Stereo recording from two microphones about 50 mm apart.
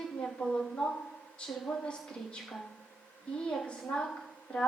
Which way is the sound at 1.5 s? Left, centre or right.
Centre.